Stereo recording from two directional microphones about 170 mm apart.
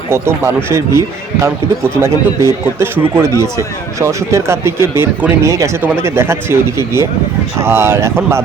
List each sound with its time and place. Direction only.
0.1 s speech: 15° right (ahead or behind)